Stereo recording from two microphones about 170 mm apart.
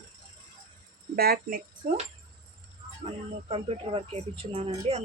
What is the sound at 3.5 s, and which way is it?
Speech, 35° right (ahead or behind).